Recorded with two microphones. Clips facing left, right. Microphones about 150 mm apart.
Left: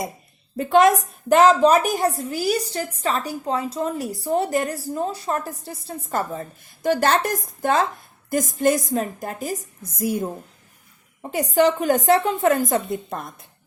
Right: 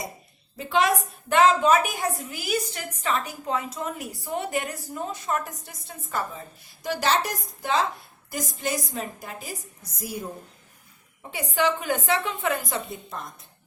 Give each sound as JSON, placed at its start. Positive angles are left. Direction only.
{"t": 0.5, "sound": "a woman's voice", "side_deg": 45}